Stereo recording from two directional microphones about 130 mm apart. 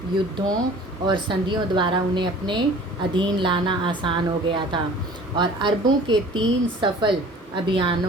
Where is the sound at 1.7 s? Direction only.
40° right (ahead or behind).